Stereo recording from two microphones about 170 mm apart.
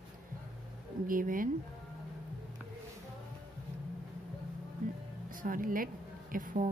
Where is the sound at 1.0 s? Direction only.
55° right (ahead or behind).